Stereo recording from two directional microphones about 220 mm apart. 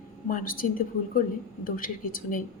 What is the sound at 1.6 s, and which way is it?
Speech, 40° left (ahead or behind).